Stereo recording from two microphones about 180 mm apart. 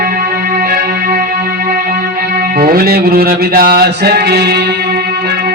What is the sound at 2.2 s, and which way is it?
Music, 55° right (ahead or behind).